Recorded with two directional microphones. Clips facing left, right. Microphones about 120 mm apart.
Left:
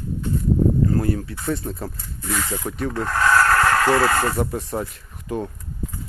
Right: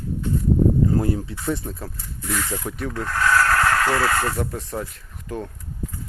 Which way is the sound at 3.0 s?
30° left (ahead or behind).